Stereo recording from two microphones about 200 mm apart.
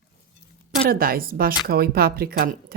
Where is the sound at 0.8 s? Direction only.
45° right (ahead or behind).